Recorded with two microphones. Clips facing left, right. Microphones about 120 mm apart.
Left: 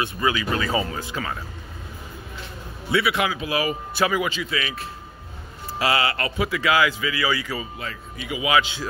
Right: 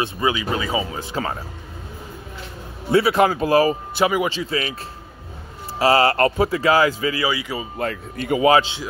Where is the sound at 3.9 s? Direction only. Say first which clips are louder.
Right 3 dB; 25° right (ahead or behind).